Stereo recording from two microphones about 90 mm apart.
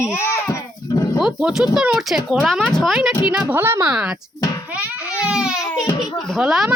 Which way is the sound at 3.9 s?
10° right (ahead or behind).